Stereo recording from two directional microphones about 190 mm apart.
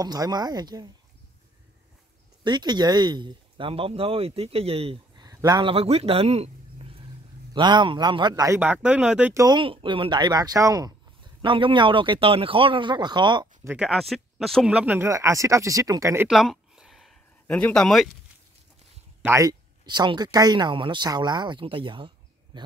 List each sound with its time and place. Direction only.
0.0 s speech: 20° right (ahead or behind)
2.4 s speech: 25° right (ahead or behind)
8.8 s speech: 5° right (ahead or behind)
9.3 s speech: 20° right (ahead or behind)
13.7 s speech: 5° right (ahead or behind)
16.3 s a sound: centre (ahead or behind)
19.2 s speech: 15° right (ahead or behind)